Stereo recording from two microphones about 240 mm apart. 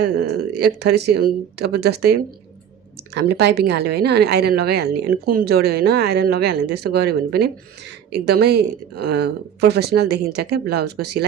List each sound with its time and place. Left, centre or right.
0.0 s speech: right
3.2 s a woman's voice: right